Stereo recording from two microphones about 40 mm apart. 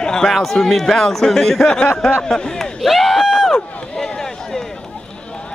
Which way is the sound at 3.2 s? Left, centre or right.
Centre.